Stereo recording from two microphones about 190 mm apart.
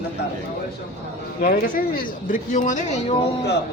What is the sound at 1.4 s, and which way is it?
Speech, 45° left (ahead or behind).